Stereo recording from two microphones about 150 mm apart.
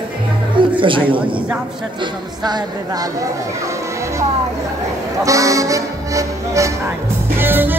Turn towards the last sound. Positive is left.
turn(degrees=-15)  # may be behind; listen again after turning